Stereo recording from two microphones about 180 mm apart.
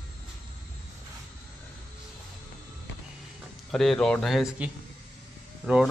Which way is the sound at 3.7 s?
Centre (ahead or behind).